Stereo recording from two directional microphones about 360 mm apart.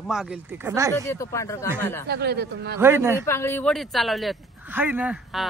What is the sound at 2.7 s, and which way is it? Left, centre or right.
Speech, centre.